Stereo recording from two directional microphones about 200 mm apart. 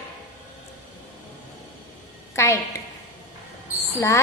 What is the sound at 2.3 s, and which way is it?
Speech, 15° left (ahead or behind).